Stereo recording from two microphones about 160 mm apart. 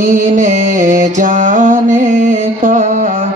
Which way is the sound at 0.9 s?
55° right (ahead or behind).